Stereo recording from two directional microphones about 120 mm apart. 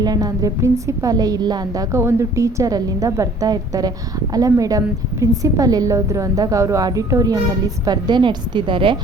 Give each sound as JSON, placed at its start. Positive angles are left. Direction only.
{"t": 0.0, "sound": "a woman's voice", "side_deg": -30}